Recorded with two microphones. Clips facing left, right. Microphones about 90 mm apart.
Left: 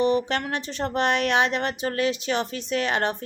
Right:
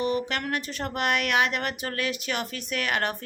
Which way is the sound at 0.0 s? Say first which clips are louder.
Left 5 dB; 30° left (ahead or behind).